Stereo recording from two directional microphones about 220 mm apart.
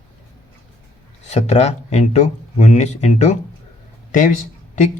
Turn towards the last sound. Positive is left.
turn(degrees=35)  # may be behind; listen again after turning